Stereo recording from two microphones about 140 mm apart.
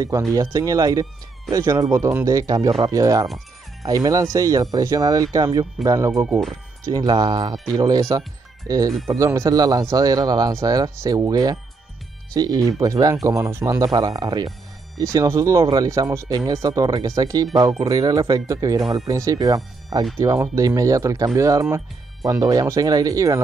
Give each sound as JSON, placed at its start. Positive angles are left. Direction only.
{"t": 0.3, "sound": "speech", "side_deg": -25}
{"t": 6.2, "sound": "speech", "side_deg": -5}
{"t": 6.9, "sound": "speech", "side_deg": -30}